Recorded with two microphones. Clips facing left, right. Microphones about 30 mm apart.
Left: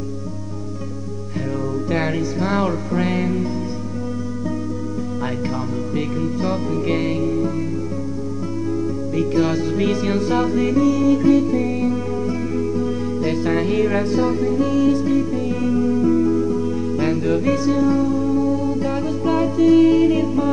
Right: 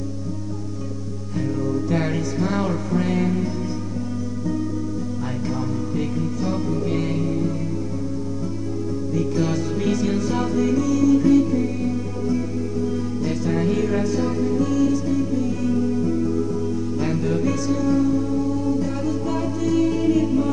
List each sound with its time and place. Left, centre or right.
1.9 s music: left
3.2 s music: centre
6.1 s music: left
7.2 s music: centre
9.3 s music: left
11.1 s music: centre